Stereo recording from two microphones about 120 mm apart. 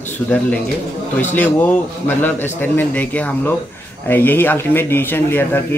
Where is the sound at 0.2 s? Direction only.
15° left (ahead or behind).